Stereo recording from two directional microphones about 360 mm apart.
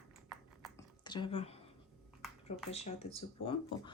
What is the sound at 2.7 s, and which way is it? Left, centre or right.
Speech, centre.